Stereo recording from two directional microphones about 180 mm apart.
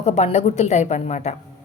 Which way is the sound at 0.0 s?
40° left (ahead or behind).